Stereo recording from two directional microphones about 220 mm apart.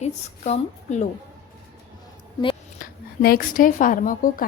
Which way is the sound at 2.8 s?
40° left (ahead or behind).